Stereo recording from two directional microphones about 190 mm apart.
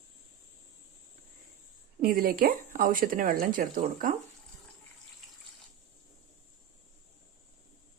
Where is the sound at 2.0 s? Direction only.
50° right (ahead or behind).